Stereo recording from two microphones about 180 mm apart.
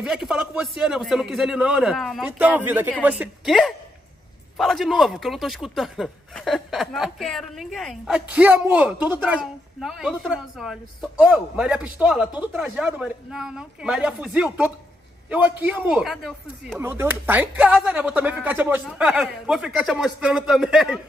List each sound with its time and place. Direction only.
0.0 s a woman's voice: 5° right (ahead or behind)
16.8 s a woman's voice: 10° right (ahead or behind)